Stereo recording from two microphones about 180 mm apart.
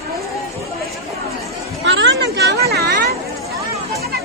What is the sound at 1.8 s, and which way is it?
Speech, 90° right.